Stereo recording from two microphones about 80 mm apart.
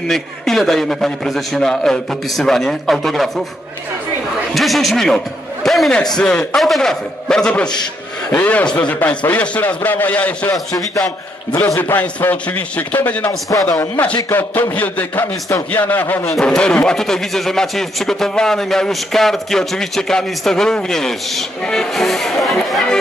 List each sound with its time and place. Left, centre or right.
0.1 s speech: centre
4.5 s speech: centre
6.1 s a man's voice: centre
11.8 s a man's voice: left
13.5 s speech: left
13.9 s a man's voice: left
16.3 s speech: centre